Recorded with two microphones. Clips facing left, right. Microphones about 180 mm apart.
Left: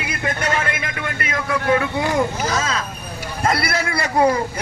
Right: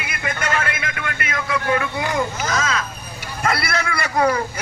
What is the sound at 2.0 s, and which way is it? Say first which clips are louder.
A man's voice: left 3 dB; 35° left (ahead or behind).